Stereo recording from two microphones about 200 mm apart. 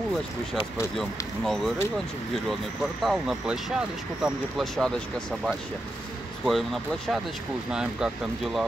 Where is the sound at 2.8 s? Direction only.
Centre (ahead or behind).